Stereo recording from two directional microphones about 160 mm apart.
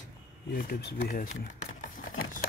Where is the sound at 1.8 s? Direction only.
55° left (ahead or behind).